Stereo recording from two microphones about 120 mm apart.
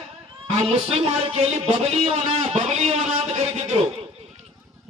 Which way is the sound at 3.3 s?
55° right (ahead or behind).